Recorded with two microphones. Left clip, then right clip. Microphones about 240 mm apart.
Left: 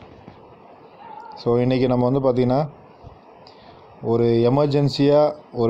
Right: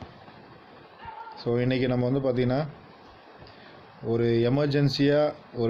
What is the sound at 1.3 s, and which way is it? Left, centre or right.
Speech, left.